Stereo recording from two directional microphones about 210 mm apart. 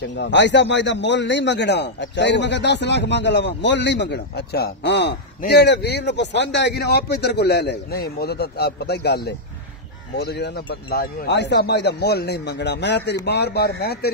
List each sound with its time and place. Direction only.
0.0 s a man's voice: 55° left (ahead or behind)